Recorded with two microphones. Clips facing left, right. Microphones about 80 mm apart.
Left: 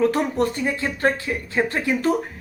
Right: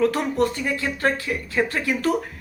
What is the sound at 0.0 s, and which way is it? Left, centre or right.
A woman's voice, left.